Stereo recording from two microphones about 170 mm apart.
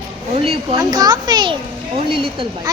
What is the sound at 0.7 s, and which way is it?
Speech, 20° right (ahead or behind).